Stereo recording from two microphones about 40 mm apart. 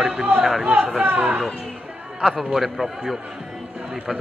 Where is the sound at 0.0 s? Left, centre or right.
Right.